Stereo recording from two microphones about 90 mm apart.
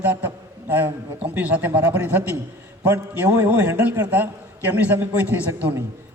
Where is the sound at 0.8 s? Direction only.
15° right (ahead or behind).